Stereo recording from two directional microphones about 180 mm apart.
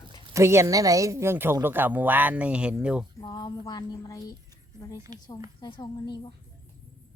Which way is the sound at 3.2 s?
25° left (ahead or behind).